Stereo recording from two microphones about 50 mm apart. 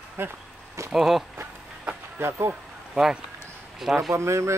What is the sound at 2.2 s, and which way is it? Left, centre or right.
Speech, right.